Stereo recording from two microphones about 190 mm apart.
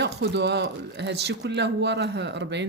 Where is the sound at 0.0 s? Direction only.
65° right (ahead or behind).